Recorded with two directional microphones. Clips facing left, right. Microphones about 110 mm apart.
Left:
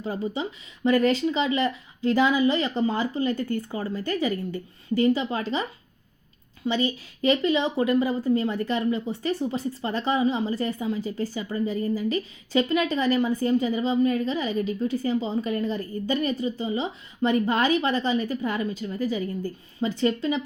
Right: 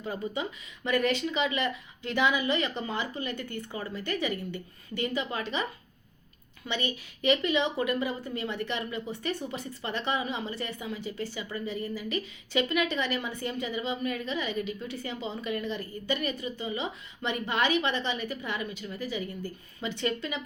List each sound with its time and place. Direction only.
0.0 s a woman's voice: 30° left (ahead or behind)
6.7 s a woman's voice: 35° left (ahead or behind)